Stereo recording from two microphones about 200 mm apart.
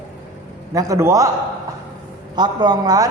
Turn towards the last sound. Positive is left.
turn(degrees=-20)  # may be behind; listen again after turning